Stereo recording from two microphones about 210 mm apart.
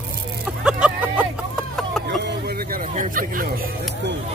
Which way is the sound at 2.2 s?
50° right (ahead or behind).